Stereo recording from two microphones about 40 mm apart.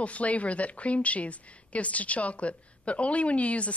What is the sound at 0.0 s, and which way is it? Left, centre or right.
Speech, left.